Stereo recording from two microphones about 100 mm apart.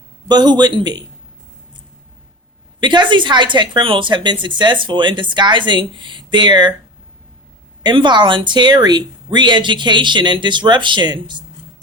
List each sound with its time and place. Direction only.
0.3 s a woman's voice: 45° right (ahead or behind)
2.8 s a woman's voice: 50° right (ahead or behind)
7.9 s a woman's voice: 50° right (ahead or behind)